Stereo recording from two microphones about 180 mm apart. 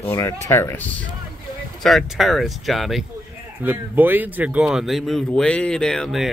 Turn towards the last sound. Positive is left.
turn(degrees=0)  # may be behind; listen again after turning